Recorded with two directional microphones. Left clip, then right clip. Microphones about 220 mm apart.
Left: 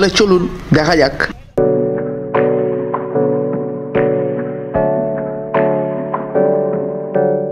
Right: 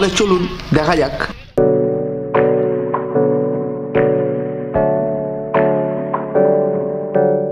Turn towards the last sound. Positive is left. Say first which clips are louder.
# even
turn(degrees=0)  # may be behind; listen again after turning